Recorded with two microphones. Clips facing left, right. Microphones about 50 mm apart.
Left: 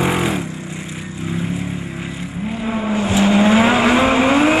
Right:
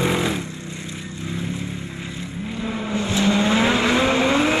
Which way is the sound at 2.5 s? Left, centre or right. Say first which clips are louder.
Left 6 dB; centre.